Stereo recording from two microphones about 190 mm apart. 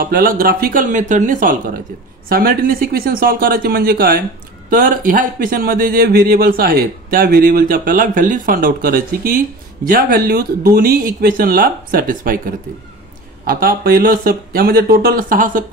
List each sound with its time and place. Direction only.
0.0 s speech: 50° right (ahead or behind)